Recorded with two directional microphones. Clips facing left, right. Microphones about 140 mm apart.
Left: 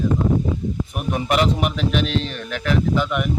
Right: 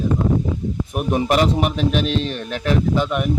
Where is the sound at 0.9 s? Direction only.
35° right (ahead or behind).